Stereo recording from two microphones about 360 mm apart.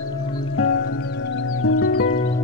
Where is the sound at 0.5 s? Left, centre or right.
Left.